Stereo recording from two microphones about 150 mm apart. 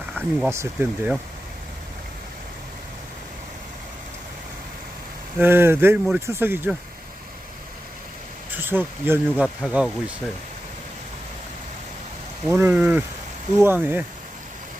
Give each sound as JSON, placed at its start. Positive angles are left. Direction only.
{"t": 0.2, "sound": "speech", "side_deg": -10}
{"t": 5.4, "sound": "speech", "side_deg": -15}
{"t": 8.4, "sound": "speech", "side_deg": -15}
{"t": 12.5, "sound": "speech", "side_deg": -15}